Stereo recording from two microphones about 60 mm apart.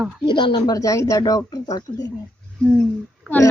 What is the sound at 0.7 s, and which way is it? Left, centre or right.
Speech, left.